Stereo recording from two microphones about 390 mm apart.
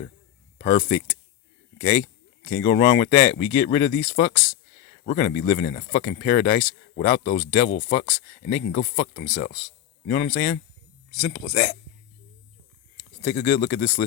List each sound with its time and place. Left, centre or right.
0.6 s speech: centre
13.2 s speech: left